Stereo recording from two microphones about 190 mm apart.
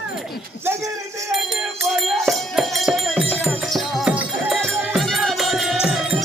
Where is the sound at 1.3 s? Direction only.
Centre (ahead or behind).